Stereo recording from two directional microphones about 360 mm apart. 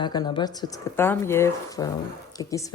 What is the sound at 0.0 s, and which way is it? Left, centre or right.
Speech, centre.